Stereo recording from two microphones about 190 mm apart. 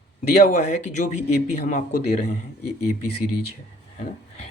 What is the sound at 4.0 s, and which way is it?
Speech, 35° left (ahead or behind).